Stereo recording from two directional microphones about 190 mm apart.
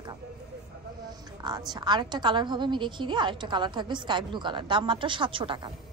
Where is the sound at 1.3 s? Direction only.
20° right (ahead or behind).